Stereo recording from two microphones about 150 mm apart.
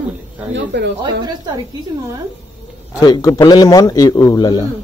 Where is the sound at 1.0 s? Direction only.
30° right (ahead or behind).